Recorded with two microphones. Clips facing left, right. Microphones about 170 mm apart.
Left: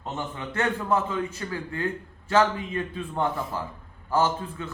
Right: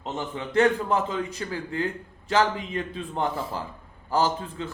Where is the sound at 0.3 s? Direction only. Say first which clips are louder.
Right 8 dB; 15° right (ahead or behind).